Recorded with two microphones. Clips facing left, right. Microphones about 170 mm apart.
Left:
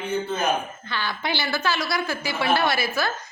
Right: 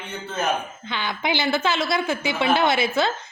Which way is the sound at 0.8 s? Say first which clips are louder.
Right 2 dB; 20° right (ahead or behind).